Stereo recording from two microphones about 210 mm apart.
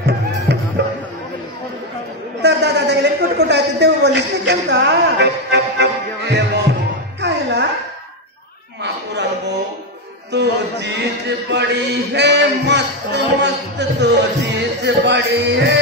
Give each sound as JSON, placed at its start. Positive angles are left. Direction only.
{"t": 2.4, "sound": "a sound", "side_deg": -55}
{"t": 7.2, "sound": "music", "side_deg": -55}
{"t": 10.3, "sound": "a man's voice", "side_deg": -55}